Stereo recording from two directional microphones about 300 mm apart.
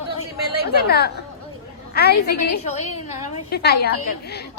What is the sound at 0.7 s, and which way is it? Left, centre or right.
Chatter, left.